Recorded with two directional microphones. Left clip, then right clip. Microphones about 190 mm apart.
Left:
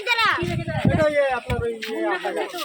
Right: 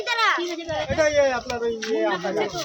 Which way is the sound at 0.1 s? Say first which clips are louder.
Left 1 dB; 50° left (ahead or behind).